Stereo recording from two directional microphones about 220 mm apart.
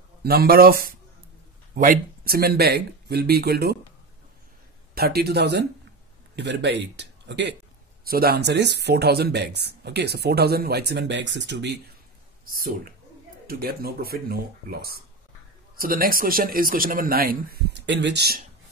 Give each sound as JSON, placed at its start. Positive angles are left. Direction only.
{"t": 0.2, "sound": "speech", "side_deg": -45}
{"t": 4.9, "sound": "speech", "side_deg": -45}
{"t": 12.4, "sound": "speech", "side_deg": -40}